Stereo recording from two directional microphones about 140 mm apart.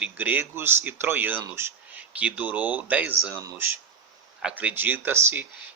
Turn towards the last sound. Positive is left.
turn(degrees=-15)  # may be behind; listen again after turning